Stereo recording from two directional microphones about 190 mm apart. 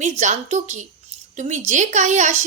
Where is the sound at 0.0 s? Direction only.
40° right (ahead or behind).